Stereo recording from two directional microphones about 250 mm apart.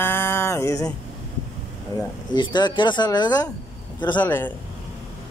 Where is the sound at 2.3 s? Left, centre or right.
Centre.